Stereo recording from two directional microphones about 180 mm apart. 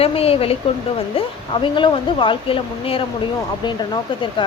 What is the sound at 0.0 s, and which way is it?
A woman's voice, 35° left (ahead or behind).